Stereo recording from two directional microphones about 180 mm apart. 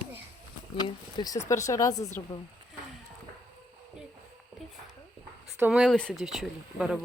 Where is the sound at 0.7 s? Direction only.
25° left (ahead or behind).